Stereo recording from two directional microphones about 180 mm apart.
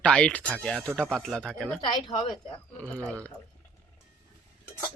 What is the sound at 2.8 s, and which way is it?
Speech, 10° left (ahead or behind).